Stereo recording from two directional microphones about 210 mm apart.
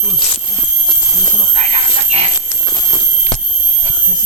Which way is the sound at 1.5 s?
30° right (ahead or behind).